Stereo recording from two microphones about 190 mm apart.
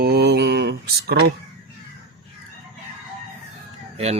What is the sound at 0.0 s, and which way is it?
Mantra, 60° right (ahead or behind).